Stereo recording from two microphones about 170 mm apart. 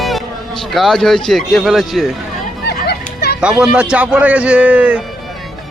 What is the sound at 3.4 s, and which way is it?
A man's voice, 5° right (ahead or behind).